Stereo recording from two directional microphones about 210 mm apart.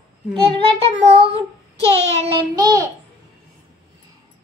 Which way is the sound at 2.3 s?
20° right (ahead or behind).